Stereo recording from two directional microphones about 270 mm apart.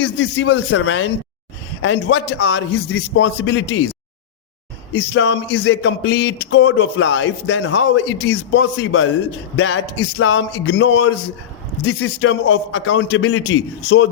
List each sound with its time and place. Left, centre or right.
0.0 s speech: left
4.9 s speech: left